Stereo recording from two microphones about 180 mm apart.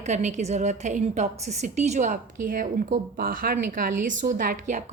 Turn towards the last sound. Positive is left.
turn(degrees=-45)  # may be behind; listen again after turning